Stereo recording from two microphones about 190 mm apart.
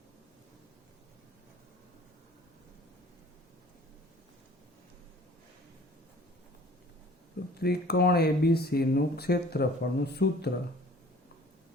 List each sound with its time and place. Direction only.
7.6 s speech: 55° left (ahead or behind)